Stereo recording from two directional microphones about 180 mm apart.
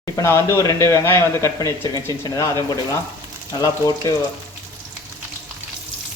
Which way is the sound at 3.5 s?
20° left (ahead or behind).